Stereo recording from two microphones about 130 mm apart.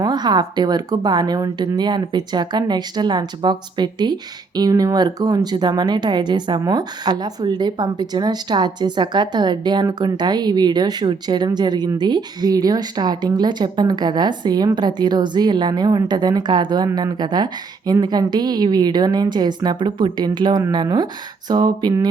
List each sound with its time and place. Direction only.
0.0 s speech: 35° right (ahead or behind)